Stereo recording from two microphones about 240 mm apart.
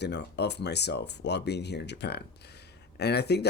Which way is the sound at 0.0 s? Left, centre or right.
Left.